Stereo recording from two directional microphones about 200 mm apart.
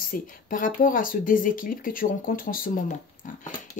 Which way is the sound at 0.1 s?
45° left (ahead or behind).